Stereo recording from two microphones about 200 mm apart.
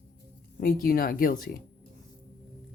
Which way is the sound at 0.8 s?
45° left (ahead or behind).